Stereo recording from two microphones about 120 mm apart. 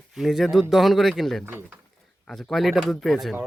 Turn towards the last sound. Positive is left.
turn(degrees=0)  # may be behind; listen again after turning